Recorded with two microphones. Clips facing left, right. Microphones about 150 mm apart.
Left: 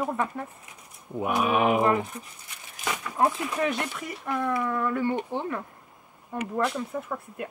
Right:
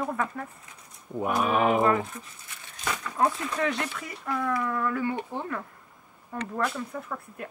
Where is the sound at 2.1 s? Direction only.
20° left (ahead or behind).